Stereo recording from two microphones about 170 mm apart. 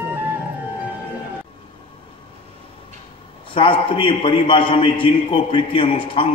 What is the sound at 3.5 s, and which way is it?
A man's voice, 30° left (ahead or behind).